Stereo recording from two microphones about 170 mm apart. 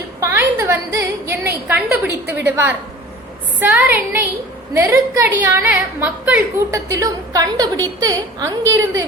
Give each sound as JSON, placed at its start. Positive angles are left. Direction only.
{"t": 0.2, "sound": "a woman's voice", "side_deg": -15}